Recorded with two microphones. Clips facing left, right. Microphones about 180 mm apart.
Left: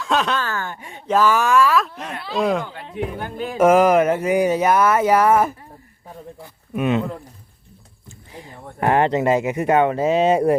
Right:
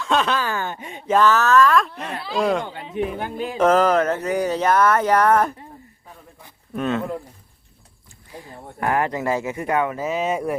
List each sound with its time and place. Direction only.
0.0 s a sound: centre (ahead or behind)
0.4 s speech: 20° right (ahead or behind)
1.2 s speech: 10° left (ahead or behind)
6.7 s speech: 15° left (ahead or behind)
8.3 s speech: 20° left (ahead or behind)